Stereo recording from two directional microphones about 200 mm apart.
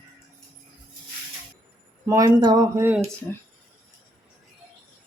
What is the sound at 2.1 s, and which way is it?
Speech, 15° right (ahead or behind).